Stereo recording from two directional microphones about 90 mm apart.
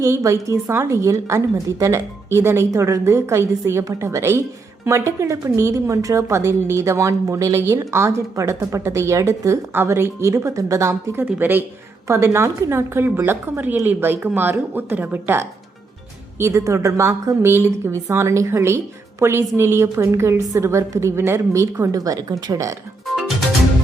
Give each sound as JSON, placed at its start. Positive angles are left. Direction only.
{"t": 0.0, "sound": "a woman's voice", "side_deg": -35}
{"t": 12.0, "sound": "a woman's voice", "side_deg": -30}